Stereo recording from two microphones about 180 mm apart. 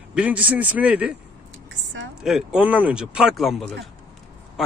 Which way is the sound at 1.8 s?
90° right.